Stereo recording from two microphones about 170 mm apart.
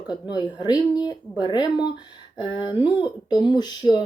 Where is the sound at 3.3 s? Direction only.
25° left (ahead or behind).